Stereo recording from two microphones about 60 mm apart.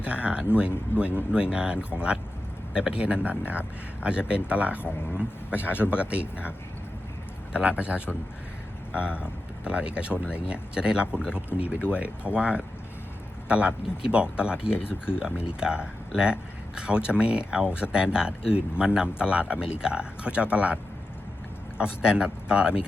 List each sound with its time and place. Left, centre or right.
0.0 s speech: right
5.5 s speech: left
5.9 s speech: right
7.5 s speech: centre
21.8 s speech: centre